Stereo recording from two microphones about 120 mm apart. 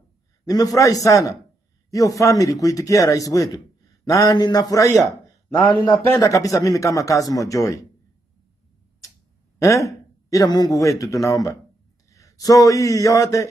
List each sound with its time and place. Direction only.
0.5 s a man's voice: 30° left (ahead or behind)
5.9 s speech: 30° left (ahead or behind)
9.6 s a man's voice: 25° left (ahead or behind)